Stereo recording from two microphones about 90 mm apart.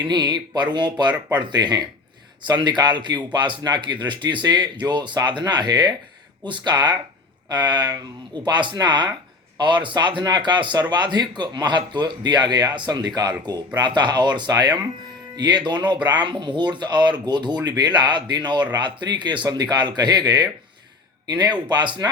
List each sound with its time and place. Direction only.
0.0 s a man's voice: 55° right (ahead or behind)